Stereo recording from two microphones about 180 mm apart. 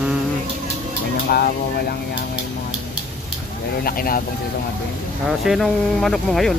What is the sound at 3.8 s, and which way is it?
Speech, 55° left (ahead or behind).